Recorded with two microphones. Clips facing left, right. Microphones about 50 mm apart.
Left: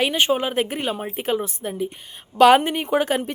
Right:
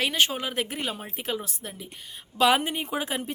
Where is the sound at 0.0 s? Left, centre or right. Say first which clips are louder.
Left 5 dB; left.